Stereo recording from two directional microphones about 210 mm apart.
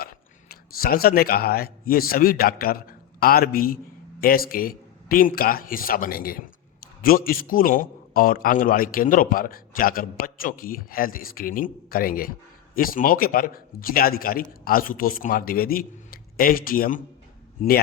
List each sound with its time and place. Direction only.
0.0 s a man's voice: 45° left (ahead or behind)